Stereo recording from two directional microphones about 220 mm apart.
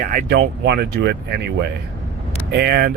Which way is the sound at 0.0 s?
40° right (ahead or behind).